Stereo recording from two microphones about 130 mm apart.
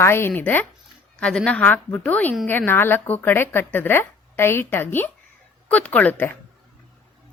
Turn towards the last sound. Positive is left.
turn(degrees=15)  # may be behind; listen again after turning